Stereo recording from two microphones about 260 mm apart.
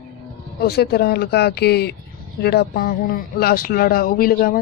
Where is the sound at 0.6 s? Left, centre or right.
Left.